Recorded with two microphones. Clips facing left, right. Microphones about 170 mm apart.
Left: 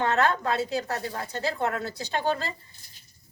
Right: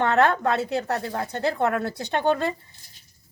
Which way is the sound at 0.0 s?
60° right (ahead or behind).